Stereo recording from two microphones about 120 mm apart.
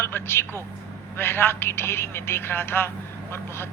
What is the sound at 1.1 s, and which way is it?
A man's voice, 20° left (ahead or behind).